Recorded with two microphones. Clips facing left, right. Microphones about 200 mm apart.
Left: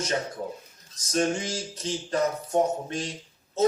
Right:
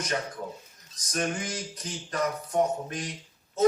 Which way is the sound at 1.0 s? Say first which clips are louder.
Left 5 dB; 25° left (ahead or behind).